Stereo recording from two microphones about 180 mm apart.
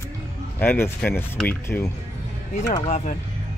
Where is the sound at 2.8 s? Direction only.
40° left (ahead or behind).